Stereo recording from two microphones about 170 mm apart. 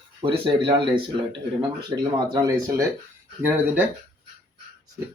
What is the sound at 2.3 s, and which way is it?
Speech, 20° right (ahead or behind).